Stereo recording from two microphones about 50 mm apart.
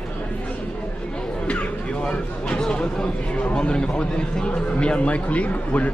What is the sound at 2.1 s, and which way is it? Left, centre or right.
A man's voice, centre.